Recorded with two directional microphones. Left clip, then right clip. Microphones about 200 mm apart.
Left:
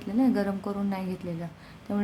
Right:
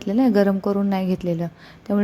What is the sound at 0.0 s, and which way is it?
A woman's voice, 35° right (ahead or behind).